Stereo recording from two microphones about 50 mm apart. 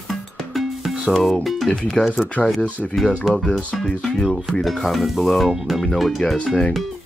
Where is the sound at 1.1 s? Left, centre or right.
Centre.